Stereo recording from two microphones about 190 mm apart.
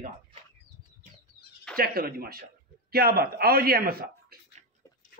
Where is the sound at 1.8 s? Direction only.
50° right (ahead or behind).